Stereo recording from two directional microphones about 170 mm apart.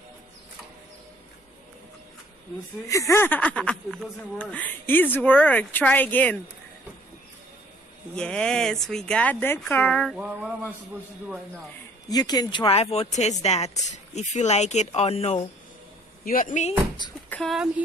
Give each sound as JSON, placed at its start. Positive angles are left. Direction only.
{"t": 2.9, "sound": "speech", "side_deg": 15}
{"t": 8.2, "sound": "speech", "side_deg": 5}
{"t": 10.1, "sound": "mantra", "side_deg": -5}
{"t": 12.1, "sound": "speech", "side_deg": 25}
{"t": 16.3, "sound": "speech", "side_deg": 50}
{"t": 17.3, "sound": "speech", "side_deg": 0}